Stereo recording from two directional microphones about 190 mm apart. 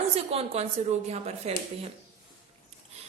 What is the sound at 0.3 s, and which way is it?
A woman's voice, 30° right (ahead or behind).